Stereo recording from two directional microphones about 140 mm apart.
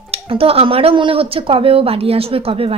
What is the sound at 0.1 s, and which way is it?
Speech, 45° right (ahead or behind).